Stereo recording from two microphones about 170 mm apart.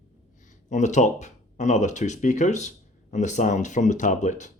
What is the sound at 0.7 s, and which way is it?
Speech, 45° left (ahead or behind).